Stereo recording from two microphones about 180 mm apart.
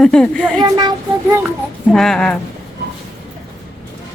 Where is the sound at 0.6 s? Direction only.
25° right (ahead or behind).